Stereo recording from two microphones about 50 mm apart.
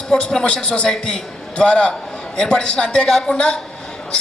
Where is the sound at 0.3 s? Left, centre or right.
Centre.